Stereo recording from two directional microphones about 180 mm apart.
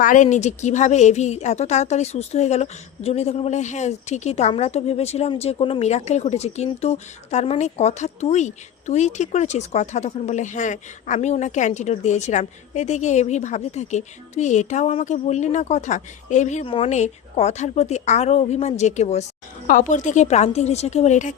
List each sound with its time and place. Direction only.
0.0 s a woman's voice: 45° left (ahead or behind)